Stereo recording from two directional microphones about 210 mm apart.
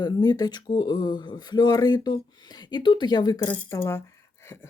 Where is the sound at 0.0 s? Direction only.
20° left (ahead or behind).